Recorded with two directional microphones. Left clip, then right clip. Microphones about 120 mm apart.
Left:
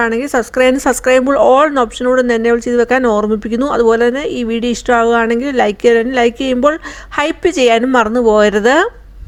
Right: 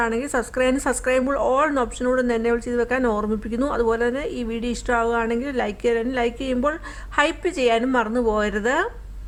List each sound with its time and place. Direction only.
0.0 s speech: 50° left (ahead or behind)